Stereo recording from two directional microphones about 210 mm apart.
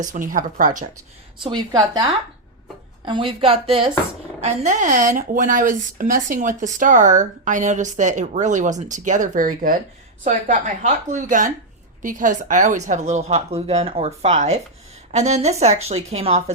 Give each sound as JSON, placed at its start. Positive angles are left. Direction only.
{"t": 0.0, "sound": "speech", "side_deg": -40}
{"t": 1.4, "sound": "a woman's voice", "side_deg": -20}